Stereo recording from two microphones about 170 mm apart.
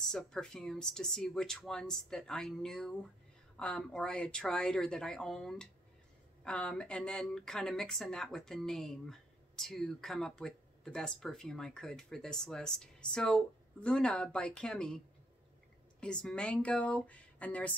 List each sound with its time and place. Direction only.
0.1 s speech: 5° left (ahead or behind)
16.0 s speech: 5° left (ahead or behind)